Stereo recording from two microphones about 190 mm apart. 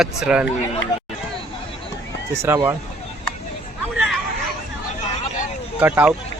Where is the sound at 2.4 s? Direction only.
15° right (ahead or behind).